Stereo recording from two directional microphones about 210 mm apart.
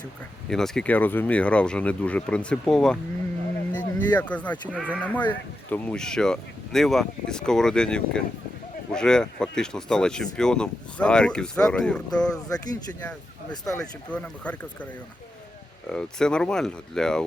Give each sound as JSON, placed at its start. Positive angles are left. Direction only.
{"t": 0.4, "sound": "speech", "side_deg": 0}
{"t": 4.7, "sound": "speech", "side_deg": -5}
{"t": 5.3, "sound": "speech", "side_deg": 5}
{"t": 12.3, "sound": "speech", "side_deg": 15}
{"t": 15.9, "sound": "speech", "side_deg": 5}